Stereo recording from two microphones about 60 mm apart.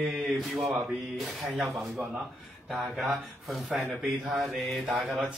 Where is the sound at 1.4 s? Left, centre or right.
Centre.